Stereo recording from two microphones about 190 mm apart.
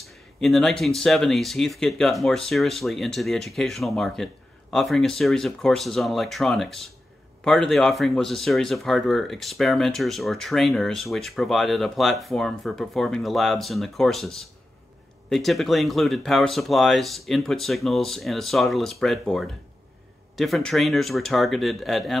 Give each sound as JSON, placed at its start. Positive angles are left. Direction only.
{"t": 0.0, "sound": "speech", "side_deg": 0}